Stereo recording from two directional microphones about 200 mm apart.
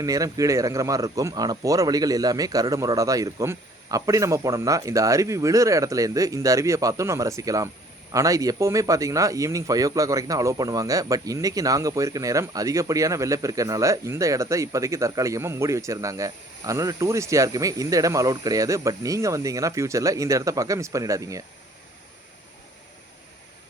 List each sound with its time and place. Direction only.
0.0 s speech: 15° right (ahead or behind)